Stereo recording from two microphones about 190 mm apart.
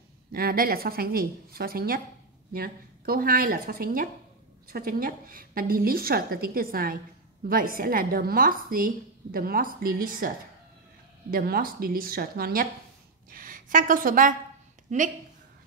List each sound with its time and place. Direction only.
0.3 s a woman's voice: 50° right (ahead or behind)